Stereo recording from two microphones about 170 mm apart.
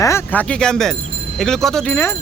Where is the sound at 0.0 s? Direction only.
15° left (ahead or behind).